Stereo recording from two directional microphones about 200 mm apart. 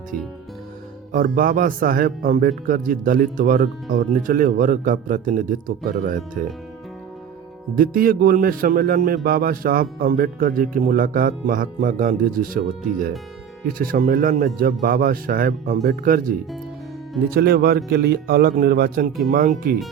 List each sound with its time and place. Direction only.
1.1 s a man's voice: 45° right (ahead or behind)
7.8 s a man's voice: 45° right (ahead or behind)